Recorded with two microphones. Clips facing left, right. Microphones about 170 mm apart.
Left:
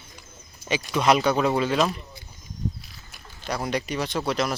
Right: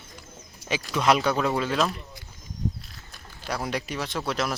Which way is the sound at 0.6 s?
75° right (ahead or behind).